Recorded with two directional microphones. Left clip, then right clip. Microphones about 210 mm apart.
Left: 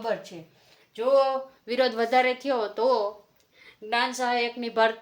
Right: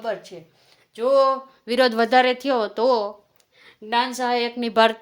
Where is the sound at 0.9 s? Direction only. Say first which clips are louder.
Right 4 dB; 40° right (ahead or behind).